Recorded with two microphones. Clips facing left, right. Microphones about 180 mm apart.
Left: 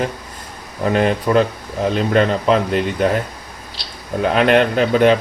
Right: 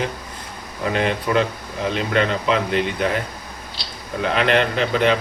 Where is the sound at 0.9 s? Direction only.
40° left (ahead or behind).